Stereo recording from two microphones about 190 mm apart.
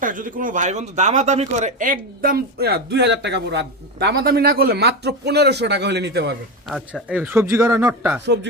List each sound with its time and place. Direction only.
0.0 s speech: 45° right (ahead or behind); by 6.3 s 65° right (ahead or behind)
6.7 s speech: centre (ahead or behind)
8.2 s speech: 70° right (ahead or behind)